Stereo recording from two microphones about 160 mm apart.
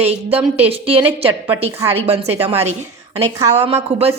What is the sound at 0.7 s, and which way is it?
A woman's voice, 35° right (ahead or behind).